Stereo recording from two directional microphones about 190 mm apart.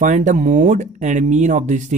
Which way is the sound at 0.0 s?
40° right (ahead or behind).